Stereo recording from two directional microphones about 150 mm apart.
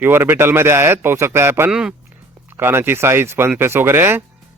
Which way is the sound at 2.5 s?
15° right (ahead or behind).